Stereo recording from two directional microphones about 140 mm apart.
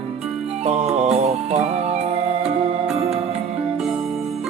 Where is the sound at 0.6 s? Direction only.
50° right (ahead or behind).